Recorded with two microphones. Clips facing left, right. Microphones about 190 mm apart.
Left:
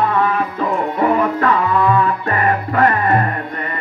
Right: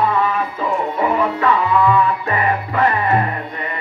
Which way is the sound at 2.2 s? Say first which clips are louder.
Left 2 dB; 50° left (ahead or behind).